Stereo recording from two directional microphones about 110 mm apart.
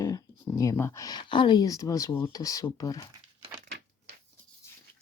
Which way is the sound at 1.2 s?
45° left (ahead or behind).